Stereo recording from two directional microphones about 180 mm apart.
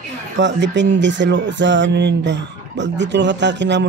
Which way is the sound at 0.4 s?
85° right.